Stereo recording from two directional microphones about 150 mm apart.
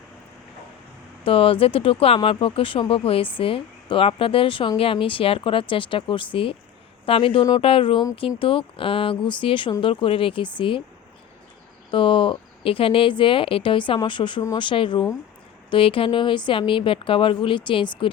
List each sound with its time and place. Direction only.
1.2 s speech: 35° left (ahead or behind)
11.9 s speech: 35° left (ahead or behind)